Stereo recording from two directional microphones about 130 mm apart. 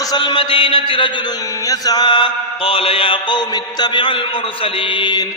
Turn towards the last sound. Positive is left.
turn(degrees=35)  # may be behind; listen again after turning